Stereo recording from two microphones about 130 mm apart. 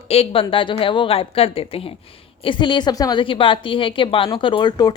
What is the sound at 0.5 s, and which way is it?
A woman's voice, 40° left (ahead or behind).